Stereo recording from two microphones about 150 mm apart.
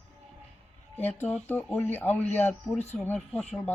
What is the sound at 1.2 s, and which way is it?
Speech, 15° left (ahead or behind).